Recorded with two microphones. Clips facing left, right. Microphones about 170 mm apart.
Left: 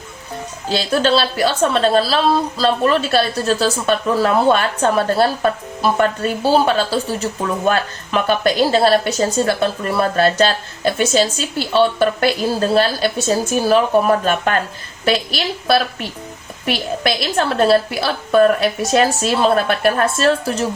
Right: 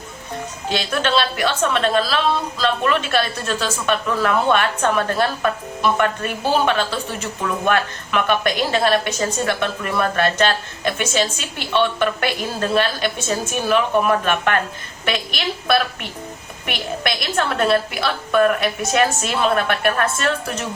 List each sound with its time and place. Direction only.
0.7 s a woman's voice: 35° left (ahead or behind)